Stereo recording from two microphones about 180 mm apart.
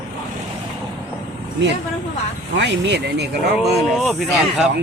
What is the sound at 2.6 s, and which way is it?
Speech, 75° right (ahead or behind).